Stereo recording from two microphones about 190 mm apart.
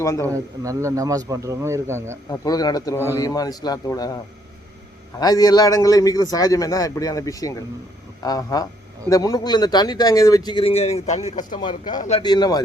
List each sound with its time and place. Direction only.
0.0 s a man's voice: 15° left (ahead or behind)
0.6 s speech: 15° right (ahead or behind)
2.3 s speech: 20° left (ahead or behind)
5.2 s speech: 20° left (ahead or behind); by 11.6 s 40° left (ahead or behind)
11.6 s speech: 25° left (ahead or behind)
11.9 s a man's voice: 35° left (ahead or behind)
12.2 s speech: 20° left (ahead or behind)